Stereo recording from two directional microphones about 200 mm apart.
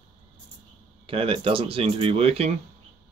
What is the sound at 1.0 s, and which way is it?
Speech, 25° right (ahead or behind).